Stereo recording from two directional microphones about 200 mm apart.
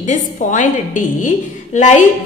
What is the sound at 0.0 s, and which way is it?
A woman's voice, 40° left (ahead or behind).